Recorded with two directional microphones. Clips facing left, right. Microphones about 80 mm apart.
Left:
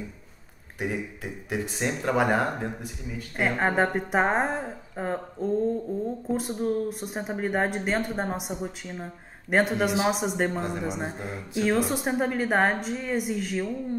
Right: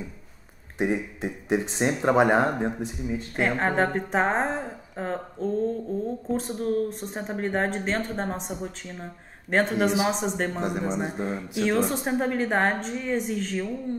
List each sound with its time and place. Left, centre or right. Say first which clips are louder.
0.7 s speech: right 5 dB; right
3.3 s a woman's voice: even; centre